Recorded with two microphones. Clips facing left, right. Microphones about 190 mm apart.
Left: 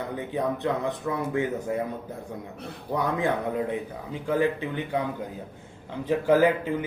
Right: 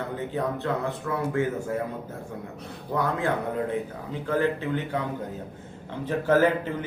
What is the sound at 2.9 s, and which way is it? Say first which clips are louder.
Speech: even; 15° left (ahead or behind).